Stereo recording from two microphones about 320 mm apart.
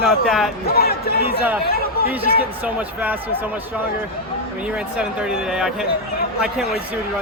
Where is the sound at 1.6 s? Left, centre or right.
Left.